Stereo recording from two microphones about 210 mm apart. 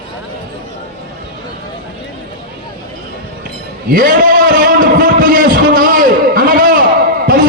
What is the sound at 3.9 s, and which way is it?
A man's voice, 45° right (ahead or behind).